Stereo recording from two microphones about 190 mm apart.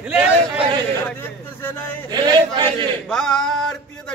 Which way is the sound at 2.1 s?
20° right (ahead or behind).